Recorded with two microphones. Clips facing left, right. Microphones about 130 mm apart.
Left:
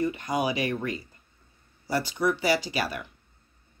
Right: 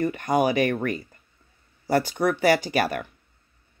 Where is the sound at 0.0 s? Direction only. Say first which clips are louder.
Right 5 dB; 55° right (ahead or behind).